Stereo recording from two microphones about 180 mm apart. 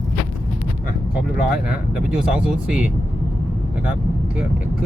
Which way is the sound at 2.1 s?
5° right (ahead or behind).